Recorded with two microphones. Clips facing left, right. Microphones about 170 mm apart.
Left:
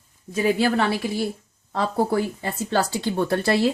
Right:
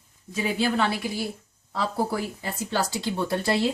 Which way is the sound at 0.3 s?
50° left (ahead or behind).